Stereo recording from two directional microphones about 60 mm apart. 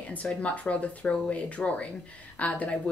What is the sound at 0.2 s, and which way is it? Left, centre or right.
Speech, left.